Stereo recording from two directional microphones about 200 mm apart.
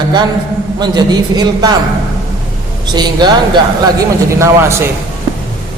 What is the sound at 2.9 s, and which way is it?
Speech, 20° right (ahead or behind).